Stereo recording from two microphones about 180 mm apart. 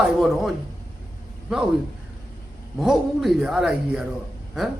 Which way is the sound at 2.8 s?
Centre (ahead or behind).